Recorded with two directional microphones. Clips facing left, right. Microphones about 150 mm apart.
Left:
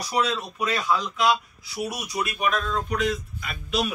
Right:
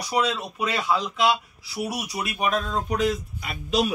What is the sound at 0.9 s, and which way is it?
Speech, 25° right (ahead or behind).